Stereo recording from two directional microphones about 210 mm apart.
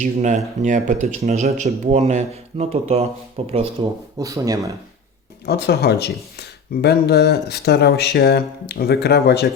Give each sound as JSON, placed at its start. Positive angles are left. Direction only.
{"t": 0.0, "sound": "speech", "side_deg": -35}
{"t": 5.5, "sound": "speech", "side_deg": 50}